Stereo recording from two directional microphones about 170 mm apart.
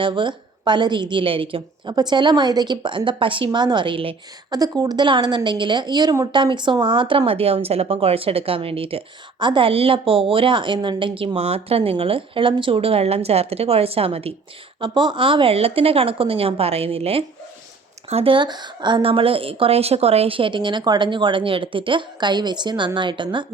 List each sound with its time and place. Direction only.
0.0 s a woman's voice: 30° right (ahead or behind)